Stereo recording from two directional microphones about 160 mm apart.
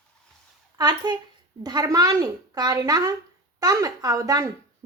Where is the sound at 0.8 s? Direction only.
25° right (ahead or behind).